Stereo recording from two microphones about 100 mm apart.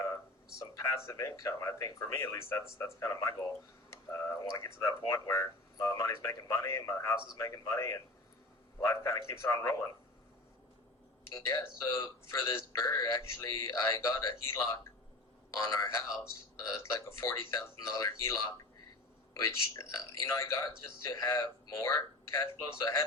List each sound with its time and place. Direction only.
0.6 s speech: 30° left (ahead or behind)
11.3 s a man's voice: 30° left (ahead or behind)